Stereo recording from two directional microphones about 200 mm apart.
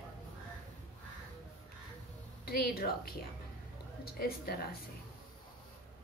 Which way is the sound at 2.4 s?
50° left (ahead or behind).